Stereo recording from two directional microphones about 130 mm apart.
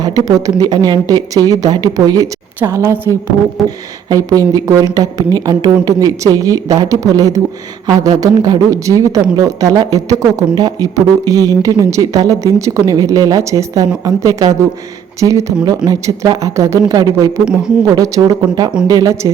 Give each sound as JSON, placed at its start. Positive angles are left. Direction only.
{"t": 0.0, "sound": "speech", "side_deg": -25}
{"t": 2.6, "sound": "a woman's voice", "side_deg": -20}
{"t": 4.1, "sound": "speech", "side_deg": -25}